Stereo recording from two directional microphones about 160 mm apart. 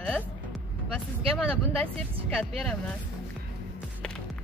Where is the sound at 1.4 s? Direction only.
5° left (ahead or behind).